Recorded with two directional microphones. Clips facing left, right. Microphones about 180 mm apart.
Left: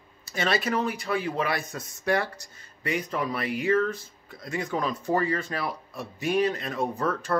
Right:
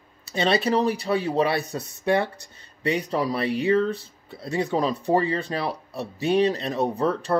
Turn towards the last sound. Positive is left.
turn(degrees=-30)  # may be behind; listen again after turning